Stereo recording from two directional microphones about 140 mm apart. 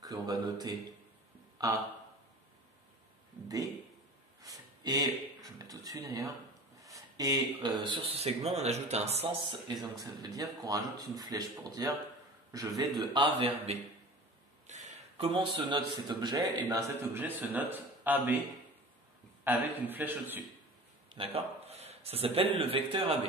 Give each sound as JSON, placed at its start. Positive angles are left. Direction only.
{"t": 0.0, "sound": "a man's voice", "side_deg": -25}
{"t": 3.4, "sound": "a man's voice", "side_deg": -15}
{"t": 4.4, "sound": "speech", "side_deg": -25}
{"t": 9.5, "sound": "a man's voice", "side_deg": -30}
{"t": 12.5, "sound": "a man's voice", "side_deg": -30}
{"t": 13.4, "sound": "a man's voice", "side_deg": -40}
{"t": 14.7, "sound": "a sound", "side_deg": -60}
{"t": 15.1, "sound": "a man's voice", "side_deg": -40}
{"t": 19.4, "sound": "a man's voice", "side_deg": -15}
{"t": 21.1, "sound": "a man's voice", "side_deg": -45}